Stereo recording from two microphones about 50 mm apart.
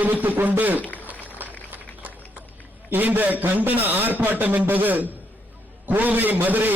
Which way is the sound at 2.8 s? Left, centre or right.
Right.